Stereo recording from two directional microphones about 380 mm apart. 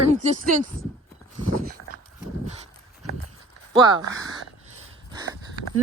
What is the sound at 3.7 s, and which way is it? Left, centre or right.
Speech, centre.